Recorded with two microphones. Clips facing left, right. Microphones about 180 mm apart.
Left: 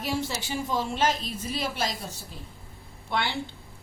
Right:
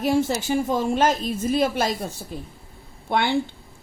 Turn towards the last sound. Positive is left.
turn(degrees=-50)  # may be behind; listen again after turning